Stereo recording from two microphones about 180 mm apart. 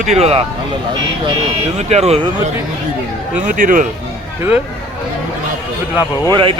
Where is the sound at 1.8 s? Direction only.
35° right (ahead or behind).